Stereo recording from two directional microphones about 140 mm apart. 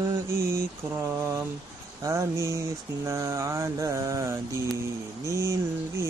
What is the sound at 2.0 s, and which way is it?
Mantra, 20° right (ahead or behind).